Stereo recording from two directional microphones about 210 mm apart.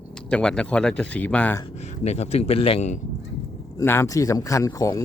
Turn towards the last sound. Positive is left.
turn(degrees=15)  # may be behind; listen again after turning